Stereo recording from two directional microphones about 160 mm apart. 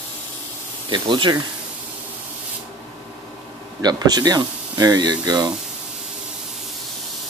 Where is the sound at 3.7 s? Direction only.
25° right (ahead or behind).